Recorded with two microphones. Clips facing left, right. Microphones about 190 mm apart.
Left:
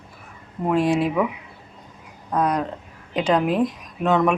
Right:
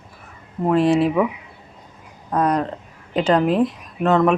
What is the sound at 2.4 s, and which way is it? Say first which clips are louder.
Speech: right 4 dB; 10° left (ahead or behind).